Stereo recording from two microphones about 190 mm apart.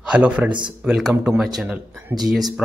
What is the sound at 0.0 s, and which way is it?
Speech, 5° right (ahead or behind).